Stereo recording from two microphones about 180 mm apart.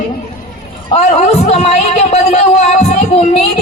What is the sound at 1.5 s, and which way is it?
Music, 35° left (ahead or behind).